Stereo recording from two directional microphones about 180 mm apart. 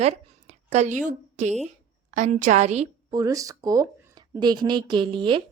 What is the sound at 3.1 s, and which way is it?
Speech, 20° right (ahead or behind).